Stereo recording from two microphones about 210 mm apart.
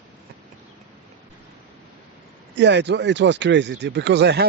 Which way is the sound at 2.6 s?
55° right (ahead or behind).